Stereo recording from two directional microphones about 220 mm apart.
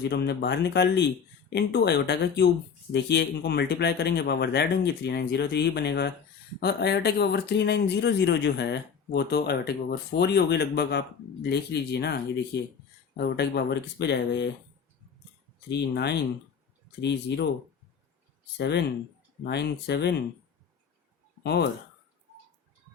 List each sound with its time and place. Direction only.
0.1 s speech: 50° left (ahead or behind)
17.0 s speech: 50° left (ahead or behind)
18.5 s speech: 50° left (ahead or behind)
21.4 s speech: 50° left (ahead or behind)